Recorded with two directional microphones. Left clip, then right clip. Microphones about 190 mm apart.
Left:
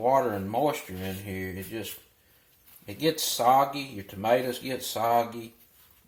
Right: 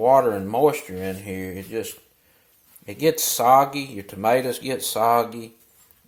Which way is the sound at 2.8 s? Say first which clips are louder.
Right 6 dB; 35° right (ahead or behind).